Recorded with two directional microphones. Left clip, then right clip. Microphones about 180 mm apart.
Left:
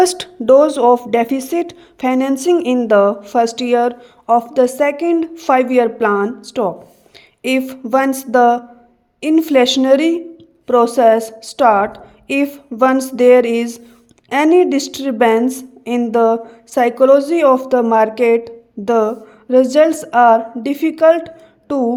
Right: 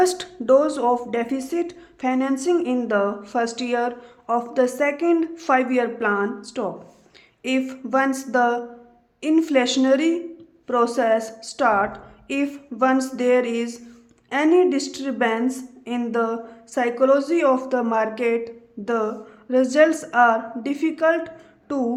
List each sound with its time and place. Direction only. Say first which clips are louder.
0.0 s speech: left 7 dB; 30° left (ahead or behind)